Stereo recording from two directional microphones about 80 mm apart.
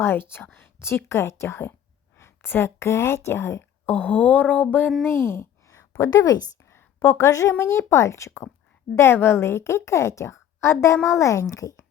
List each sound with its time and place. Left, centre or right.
0.0 s a woman's voice: left
5.0 s speech: left
6.7 s a sound: left
7.6 s a woman's voice: left